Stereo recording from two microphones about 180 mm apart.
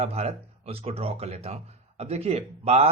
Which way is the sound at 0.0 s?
35° right (ahead or behind).